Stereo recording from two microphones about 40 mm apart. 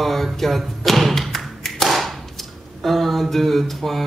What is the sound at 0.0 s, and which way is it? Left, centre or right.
Thump, centre.